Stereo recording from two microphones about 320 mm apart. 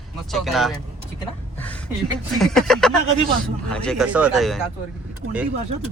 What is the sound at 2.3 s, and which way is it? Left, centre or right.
Speech, centre.